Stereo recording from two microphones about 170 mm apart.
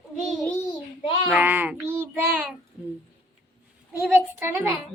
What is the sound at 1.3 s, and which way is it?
Child singing, 10° right (ahead or behind).